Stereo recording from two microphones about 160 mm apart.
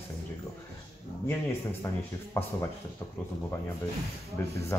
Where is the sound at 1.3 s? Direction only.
15° left (ahead or behind).